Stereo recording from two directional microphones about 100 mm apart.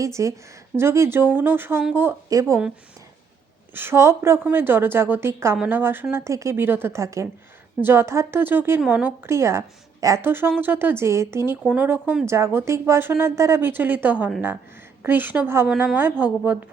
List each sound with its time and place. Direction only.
0.0 s speech: 30° right (ahead or behind)
3.8 s a woman's voice: 25° right (ahead or behind)
9.2 s a woman's voice: 30° right (ahead or behind)